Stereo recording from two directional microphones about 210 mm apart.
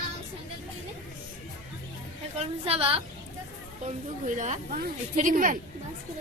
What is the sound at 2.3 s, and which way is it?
Speech, 30° right (ahead or behind).